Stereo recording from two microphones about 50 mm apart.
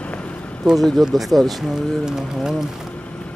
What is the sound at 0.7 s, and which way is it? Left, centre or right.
Speech, centre.